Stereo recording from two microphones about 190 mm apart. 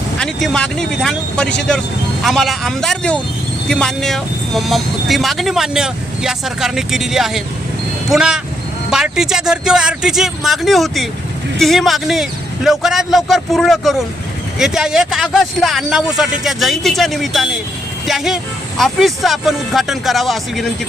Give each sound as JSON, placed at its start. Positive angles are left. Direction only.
{"t": 0.2, "sound": "speech", "side_deg": 5}